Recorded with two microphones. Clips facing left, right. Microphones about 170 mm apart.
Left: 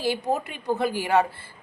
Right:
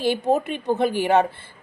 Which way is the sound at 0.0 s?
20° right (ahead or behind).